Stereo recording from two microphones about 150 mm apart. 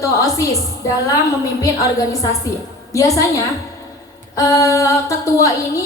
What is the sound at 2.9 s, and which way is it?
Speech, 20° left (ahead or behind).